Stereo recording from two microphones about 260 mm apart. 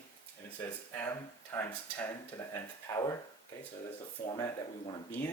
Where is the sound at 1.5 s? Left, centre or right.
Centre.